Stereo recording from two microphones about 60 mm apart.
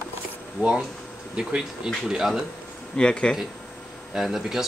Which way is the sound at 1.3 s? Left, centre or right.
Centre.